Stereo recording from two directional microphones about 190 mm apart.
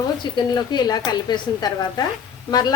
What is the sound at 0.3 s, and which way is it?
A woman's voice, 20° left (ahead or behind).